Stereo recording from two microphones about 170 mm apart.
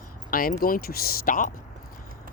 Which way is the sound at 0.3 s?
60° left (ahead or behind).